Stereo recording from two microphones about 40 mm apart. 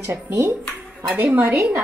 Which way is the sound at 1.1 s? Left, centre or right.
Right.